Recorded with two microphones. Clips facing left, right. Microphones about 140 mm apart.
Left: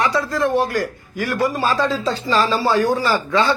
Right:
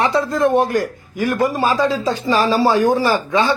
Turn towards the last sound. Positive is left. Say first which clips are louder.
# right 1 dB
turn(degrees=-15)  # may be behind; listen again after turning